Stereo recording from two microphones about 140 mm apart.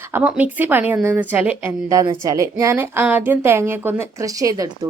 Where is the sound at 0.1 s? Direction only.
10° right (ahead or behind).